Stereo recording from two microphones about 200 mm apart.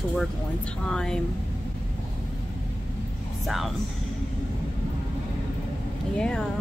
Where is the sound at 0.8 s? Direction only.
5° left (ahead or behind).